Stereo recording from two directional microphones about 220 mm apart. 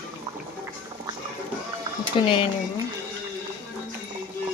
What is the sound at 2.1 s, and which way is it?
Speech, 25° left (ahead or behind).